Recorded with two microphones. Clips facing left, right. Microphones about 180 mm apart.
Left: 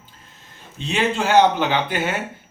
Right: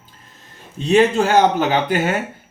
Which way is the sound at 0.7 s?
45° right (ahead or behind).